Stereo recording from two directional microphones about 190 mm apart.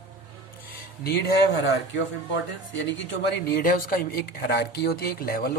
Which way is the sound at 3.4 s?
50° left (ahead or behind).